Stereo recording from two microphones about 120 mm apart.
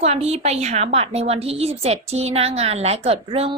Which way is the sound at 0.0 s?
60° right (ahead or behind).